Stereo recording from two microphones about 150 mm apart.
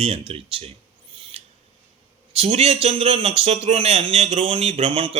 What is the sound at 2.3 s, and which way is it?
Speech, 45° right (ahead or behind).